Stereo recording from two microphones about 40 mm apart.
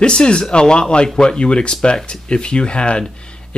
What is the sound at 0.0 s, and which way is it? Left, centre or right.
Speech, left.